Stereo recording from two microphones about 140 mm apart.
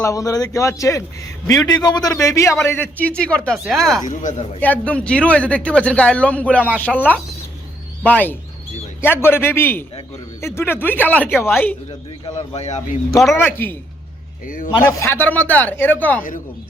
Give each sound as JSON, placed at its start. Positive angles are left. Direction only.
{"t": 0.0, "sound": "a man's voice", "side_deg": 25}
{"t": 4.0, "sound": "speech", "side_deg": 65}
{"t": 4.6, "sound": "speech", "side_deg": 10}
{"t": 6.6, "sound": "speech", "side_deg": -10}
{"t": 6.8, "sound": "speech", "side_deg": 10}
{"t": 12.3, "sound": "a man's voice", "side_deg": 50}
{"t": 13.3, "sound": "speech", "side_deg": 15}
{"t": 14.4, "sound": "a man's voice", "side_deg": 80}
{"t": 14.8, "sound": "speech", "side_deg": 20}